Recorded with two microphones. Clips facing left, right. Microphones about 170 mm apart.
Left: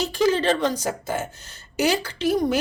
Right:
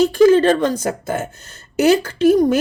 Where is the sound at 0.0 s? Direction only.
50° right (ahead or behind).